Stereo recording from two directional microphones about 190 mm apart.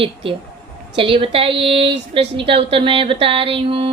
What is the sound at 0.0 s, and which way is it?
Speech, 30° right (ahead or behind).